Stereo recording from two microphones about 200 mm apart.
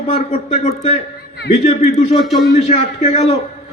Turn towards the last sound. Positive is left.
turn(degrees=30)  # may be behind; listen again after turning